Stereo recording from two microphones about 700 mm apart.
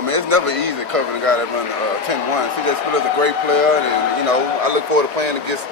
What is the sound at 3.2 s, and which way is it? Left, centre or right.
A man's voice, right.